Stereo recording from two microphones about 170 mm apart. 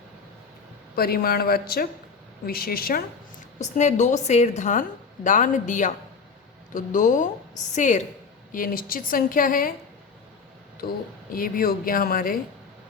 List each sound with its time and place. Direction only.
0.9 s a woman's voice: 65° left (ahead or behind)
3.6 s a woman's voice: 45° left (ahead or behind)
8.5 s a woman's voice: 55° left (ahead or behind)
11.3 s a woman's voice: 55° left (ahead or behind)